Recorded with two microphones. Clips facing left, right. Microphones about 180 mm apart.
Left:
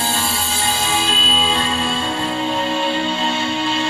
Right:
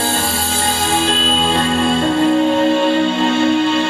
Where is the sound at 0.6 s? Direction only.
55° right (ahead or behind).